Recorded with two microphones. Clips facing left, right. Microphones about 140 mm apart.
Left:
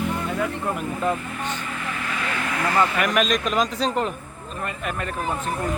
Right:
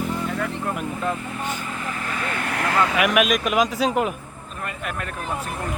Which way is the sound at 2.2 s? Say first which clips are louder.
Even; 50° right (ahead or behind).